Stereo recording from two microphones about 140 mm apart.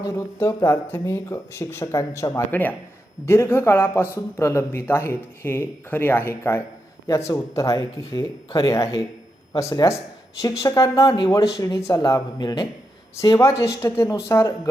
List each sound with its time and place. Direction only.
0.1 s a man's voice: 15° left (ahead or behind)